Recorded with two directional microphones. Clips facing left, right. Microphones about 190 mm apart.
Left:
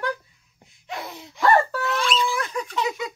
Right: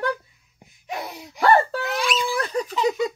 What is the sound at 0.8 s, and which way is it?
Wail, 15° right (ahead or behind).